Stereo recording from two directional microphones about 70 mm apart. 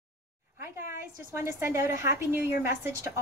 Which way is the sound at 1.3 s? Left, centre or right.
Right.